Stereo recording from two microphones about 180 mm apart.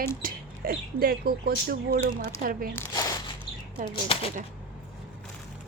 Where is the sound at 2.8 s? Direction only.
20° left (ahead or behind).